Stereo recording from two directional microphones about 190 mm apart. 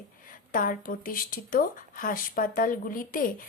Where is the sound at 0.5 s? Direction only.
45° left (ahead or behind).